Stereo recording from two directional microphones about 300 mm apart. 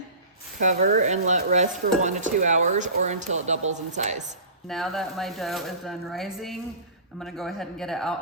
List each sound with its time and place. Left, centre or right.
0.6 s speech: right
4.7 s speech: centre